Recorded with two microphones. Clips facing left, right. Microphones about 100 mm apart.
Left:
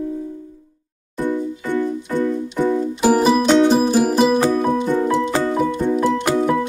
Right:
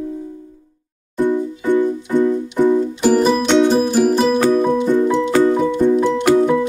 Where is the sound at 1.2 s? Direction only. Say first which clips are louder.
Right 4 dB; 20° right (ahead or behind).